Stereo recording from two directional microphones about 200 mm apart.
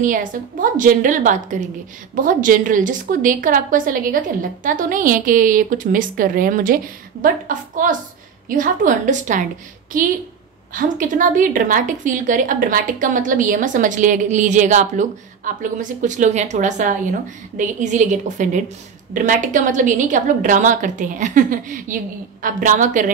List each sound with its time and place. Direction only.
0.0 s a woman's voice: 40° right (ahead or behind)
10.7 s a woman's voice: 40° right (ahead or behind)